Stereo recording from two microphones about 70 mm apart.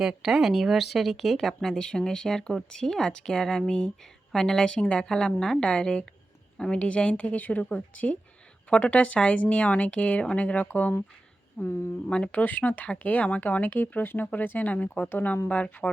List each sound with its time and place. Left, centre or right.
0.0 s speech: centre